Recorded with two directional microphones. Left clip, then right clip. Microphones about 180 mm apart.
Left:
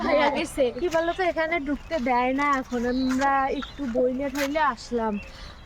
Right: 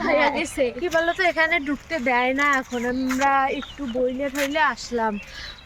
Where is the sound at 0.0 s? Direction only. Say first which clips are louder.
Right 2 dB; 25° right (ahead or behind).